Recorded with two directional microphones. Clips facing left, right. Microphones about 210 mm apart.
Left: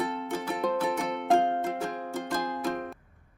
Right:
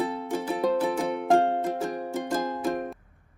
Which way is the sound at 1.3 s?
15° right (ahead or behind).